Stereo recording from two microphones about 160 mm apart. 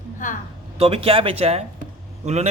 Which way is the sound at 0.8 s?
35° right (ahead or behind).